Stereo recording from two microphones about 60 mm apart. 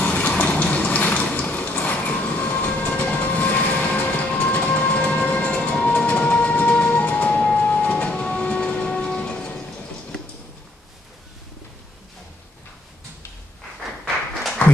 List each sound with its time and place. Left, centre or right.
0.0 s a sound: left
1.1 s train: left
7.9 s train: centre